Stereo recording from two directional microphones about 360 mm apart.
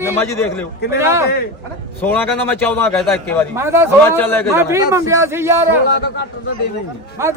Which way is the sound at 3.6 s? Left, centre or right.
Centre.